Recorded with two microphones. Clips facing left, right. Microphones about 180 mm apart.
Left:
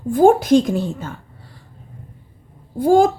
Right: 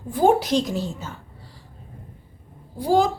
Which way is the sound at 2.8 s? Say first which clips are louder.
Left 6 dB; 50° left (ahead or behind).